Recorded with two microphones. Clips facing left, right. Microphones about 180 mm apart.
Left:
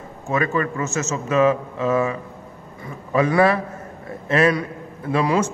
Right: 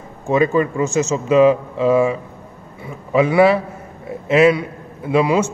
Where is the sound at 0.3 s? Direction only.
20° right (ahead or behind).